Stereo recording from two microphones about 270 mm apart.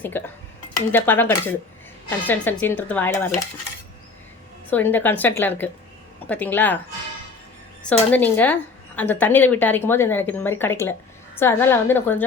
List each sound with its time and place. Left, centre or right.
0.1 s a woman's voice: centre
4.7 s a woman's voice: centre
7.9 s a woman's voice: centre